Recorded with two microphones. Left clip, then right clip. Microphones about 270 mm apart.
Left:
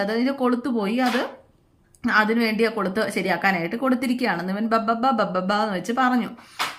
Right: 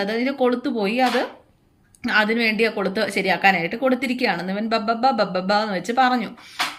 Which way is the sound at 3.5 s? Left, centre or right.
Centre.